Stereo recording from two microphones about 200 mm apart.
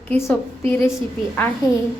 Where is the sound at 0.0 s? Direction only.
10° left (ahead or behind).